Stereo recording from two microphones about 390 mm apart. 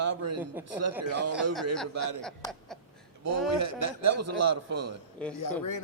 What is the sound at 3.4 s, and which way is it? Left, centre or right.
A man's voice, right.